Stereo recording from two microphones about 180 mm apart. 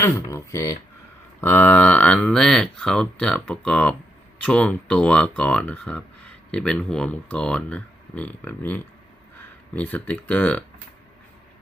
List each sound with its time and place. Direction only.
0.0 s speech: 15° left (ahead or behind)